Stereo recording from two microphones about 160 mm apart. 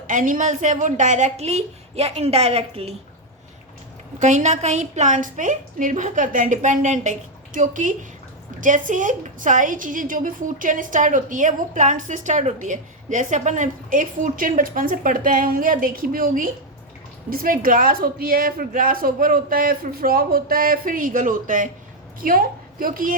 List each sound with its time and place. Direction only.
0.1 s a woman's voice: 55° right (ahead or behind); by 2.9 s 40° right (ahead or behind)
4.2 s a woman's voice: 45° right (ahead or behind)